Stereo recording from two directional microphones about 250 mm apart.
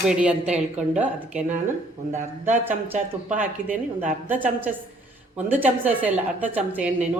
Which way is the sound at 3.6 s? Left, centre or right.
Right.